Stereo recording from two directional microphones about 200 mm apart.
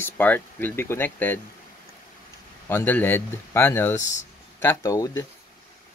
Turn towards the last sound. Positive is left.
turn(degrees=15)  # may be behind; listen again after turning